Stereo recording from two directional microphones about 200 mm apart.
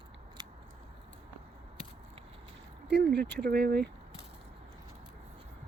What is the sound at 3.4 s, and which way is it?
Speech, 50° right (ahead or behind).